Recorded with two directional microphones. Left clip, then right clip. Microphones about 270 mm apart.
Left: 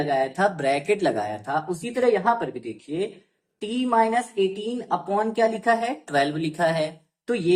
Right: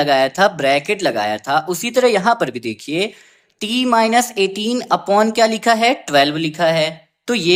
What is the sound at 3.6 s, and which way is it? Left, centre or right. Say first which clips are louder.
Speech: right 6 dB; right.